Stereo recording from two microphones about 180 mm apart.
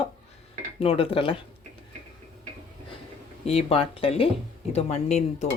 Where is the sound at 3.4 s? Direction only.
35° left (ahead or behind).